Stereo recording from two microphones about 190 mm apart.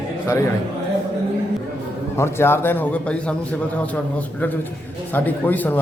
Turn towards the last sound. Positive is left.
turn(degrees=10)  # may be behind; listen again after turning